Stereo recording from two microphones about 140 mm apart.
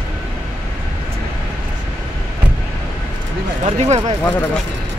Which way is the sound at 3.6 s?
50° right (ahead or behind).